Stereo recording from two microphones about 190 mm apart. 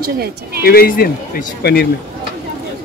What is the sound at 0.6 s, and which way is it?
Speech, 55° left (ahead or behind).